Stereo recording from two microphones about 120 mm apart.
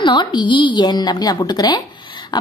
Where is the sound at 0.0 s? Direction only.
40° left (ahead or behind).